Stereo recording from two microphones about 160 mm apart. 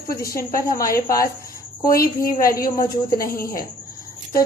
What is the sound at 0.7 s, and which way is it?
Speech, 20° left (ahead or behind).